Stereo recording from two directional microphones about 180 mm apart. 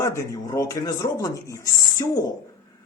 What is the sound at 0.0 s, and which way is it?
Speech, 15° left (ahead or behind).